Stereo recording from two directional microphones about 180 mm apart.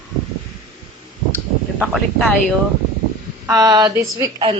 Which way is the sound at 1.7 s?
5° right (ahead or behind).